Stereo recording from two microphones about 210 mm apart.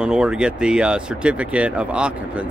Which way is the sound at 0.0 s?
5° right (ahead or behind).